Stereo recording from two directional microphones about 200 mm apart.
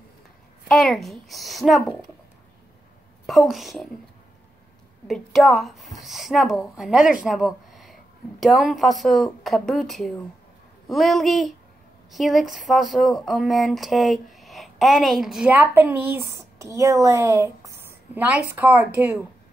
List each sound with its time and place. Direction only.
0.7 s a woman's voice: centre (ahead or behind)
3.3 s a woman's voice: centre (ahead or behind)
5.0 s a woman's voice: centre (ahead or behind)